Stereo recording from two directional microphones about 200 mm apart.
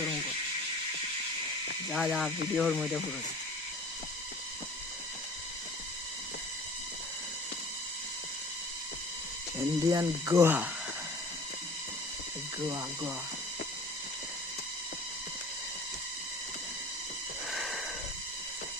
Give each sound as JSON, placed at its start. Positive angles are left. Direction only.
{"t": 1.9, "sound": "speech", "side_deg": 0}
{"t": 9.6, "sound": "speech", "side_deg": -20}
{"t": 12.6, "sound": "speech", "side_deg": -15}
{"t": 17.5, "sound": "sniff", "side_deg": 0}